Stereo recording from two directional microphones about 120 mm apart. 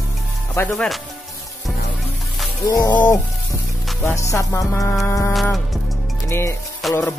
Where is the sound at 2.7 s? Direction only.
35° left (ahead or behind).